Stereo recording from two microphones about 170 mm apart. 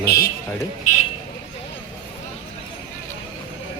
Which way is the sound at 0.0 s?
70° left (ahead or behind).